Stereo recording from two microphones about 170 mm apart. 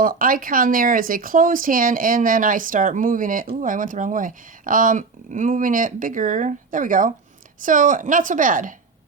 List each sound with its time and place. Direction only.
0.0 s speech: 55° right (ahead or behind)